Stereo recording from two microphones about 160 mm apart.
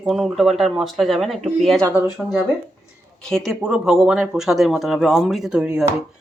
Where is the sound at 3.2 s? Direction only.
5° left (ahead or behind).